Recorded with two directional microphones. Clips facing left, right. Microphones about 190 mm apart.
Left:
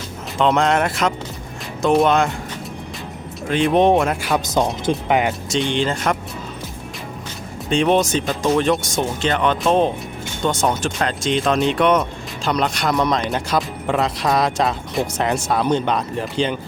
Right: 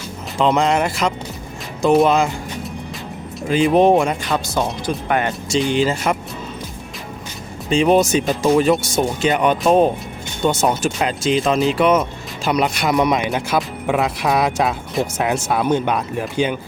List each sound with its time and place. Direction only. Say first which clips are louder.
0.3 s speech: even; centre (ahead or behind)
3.5 s speech: right 2 dB; 5° right (ahead or behind)
4.5 s speech: left 2 dB; 20° left (ahead or behind)
5.5 s speech: right 3 dB; 5° right (ahead or behind)
7.7 s speech: right 2 dB; 5° right (ahead or behind)